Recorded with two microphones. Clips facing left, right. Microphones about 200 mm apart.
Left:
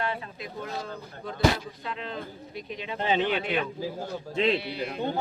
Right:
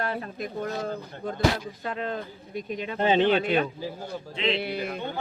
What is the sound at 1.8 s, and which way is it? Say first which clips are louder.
Speech: right 4 dB; 45° right (ahead or behind).